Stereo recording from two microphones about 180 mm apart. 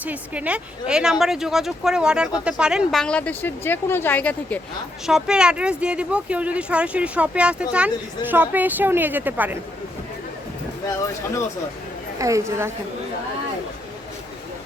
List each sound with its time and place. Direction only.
0.0 s speech: 10° right (ahead or behind); by 4.6 s 10° left (ahead or behind)
5.0 s speech: 5° right (ahead or behind)
12.2 s speech: 15° right (ahead or behind)